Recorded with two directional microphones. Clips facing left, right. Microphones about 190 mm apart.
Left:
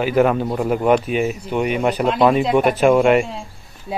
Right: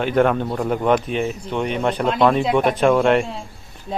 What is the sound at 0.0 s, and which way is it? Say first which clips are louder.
Speech: left 1 dB; 5° left (ahead or behind).